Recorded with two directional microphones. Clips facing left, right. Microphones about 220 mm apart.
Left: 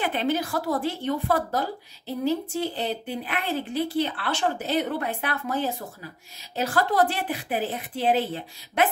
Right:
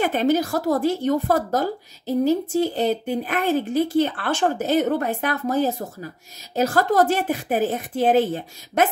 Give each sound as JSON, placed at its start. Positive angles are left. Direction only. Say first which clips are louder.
{"t": 0.0, "sound": "a woman's voice", "louder": "right 6 dB", "side_deg": -45}